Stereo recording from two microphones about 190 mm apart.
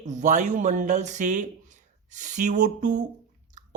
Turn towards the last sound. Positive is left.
turn(degrees=-40)  # may be behind; listen again after turning